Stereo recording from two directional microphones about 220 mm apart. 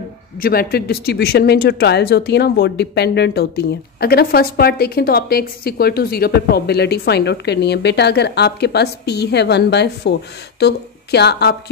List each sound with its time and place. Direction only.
0.4 s speech: 45° left (ahead or behind)